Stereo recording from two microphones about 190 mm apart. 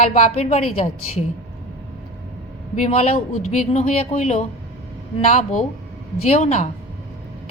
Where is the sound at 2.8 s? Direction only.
30° left (ahead or behind).